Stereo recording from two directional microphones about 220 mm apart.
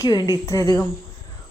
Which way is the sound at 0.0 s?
15° left (ahead or behind).